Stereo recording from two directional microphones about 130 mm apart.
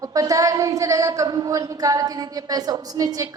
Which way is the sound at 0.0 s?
25° right (ahead or behind).